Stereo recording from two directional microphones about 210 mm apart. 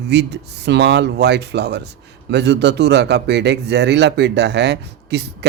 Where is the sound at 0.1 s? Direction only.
55° right (ahead or behind).